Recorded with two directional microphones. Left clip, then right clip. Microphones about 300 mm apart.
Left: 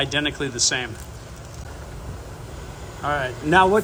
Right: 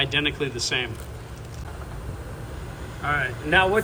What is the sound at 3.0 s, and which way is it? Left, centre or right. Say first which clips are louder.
Speech: left 1 dB; centre.